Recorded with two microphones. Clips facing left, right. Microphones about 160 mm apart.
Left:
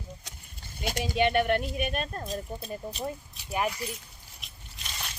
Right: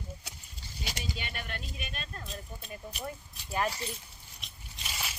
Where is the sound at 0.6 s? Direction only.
55° left (ahead or behind); by 3.0 s 35° left (ahead or behind).